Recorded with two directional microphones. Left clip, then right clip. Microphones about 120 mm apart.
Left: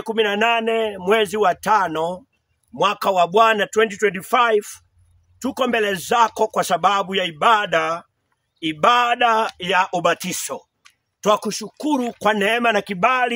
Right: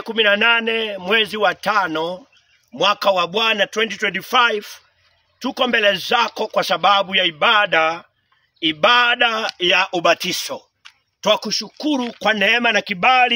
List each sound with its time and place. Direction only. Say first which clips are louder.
0.1 s speech: right 3 dB; 20° left (ahead or behind)
11.2 s speech: right 1 dB; 40° left (ahead or behind)